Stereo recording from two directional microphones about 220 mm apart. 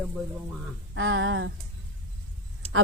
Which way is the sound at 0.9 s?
65° right (ahead or behind).